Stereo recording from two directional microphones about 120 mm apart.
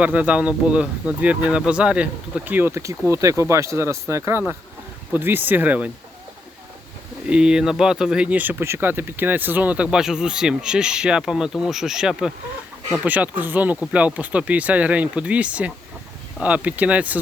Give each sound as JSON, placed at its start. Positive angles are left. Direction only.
{"t": 0.0, "sound": "speech", "side_deg": -10}
{"t": 7.3, "sound": "speech", "side_deg": -5}